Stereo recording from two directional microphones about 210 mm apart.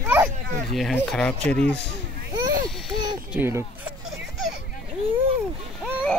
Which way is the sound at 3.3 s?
10° right (ahead or behind).